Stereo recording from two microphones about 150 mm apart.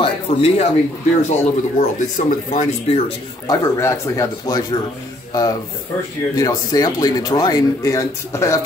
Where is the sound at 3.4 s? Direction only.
20° left (ahead or behind).